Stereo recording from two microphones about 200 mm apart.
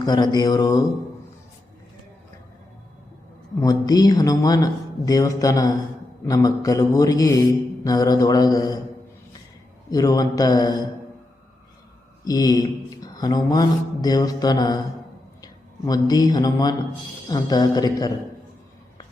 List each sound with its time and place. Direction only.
0.0 s speech: 20° left (ahead or behind)
3.6 s speech: 20° left (ahead or behind)
9.9 s speech: 20° left (ahead or behind)
12.2 s speech: 20° left (ahead or behind)
15.9 s speech: 20° left (ahead or behind)